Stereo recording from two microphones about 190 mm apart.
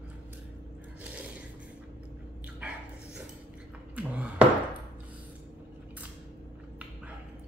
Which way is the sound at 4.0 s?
5° right (ahead or behind).